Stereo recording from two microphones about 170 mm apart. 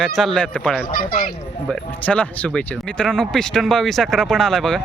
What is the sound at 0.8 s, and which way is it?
Speech, 60° left (ahead or behind).